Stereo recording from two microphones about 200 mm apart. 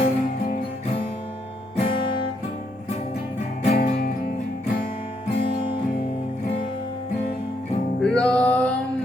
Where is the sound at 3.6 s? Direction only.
50° left (ahead or behind).